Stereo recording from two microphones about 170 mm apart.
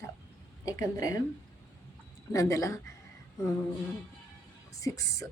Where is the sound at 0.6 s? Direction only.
20° left (ahead or behind).